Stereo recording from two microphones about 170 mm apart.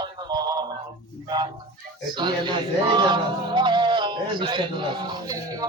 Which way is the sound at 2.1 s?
25° right (ahead or behind).